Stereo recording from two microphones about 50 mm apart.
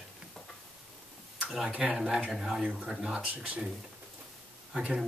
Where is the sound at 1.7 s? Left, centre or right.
Right.